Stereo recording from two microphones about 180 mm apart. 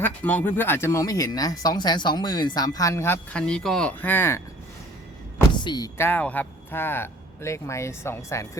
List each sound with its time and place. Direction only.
0.0 s speech: 10° left (ahead or behind)
5.5 s speech: 25° left (ahead or behind)